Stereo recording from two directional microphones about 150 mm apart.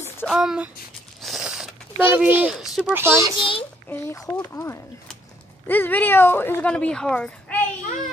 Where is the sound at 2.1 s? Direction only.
10° right (ahead or behind).